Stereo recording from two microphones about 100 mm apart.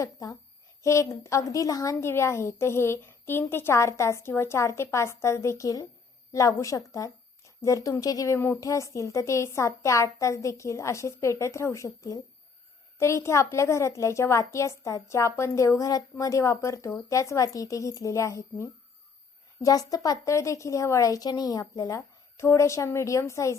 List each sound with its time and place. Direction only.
0.0 s a woman's voice: 35° left (ahead or behind)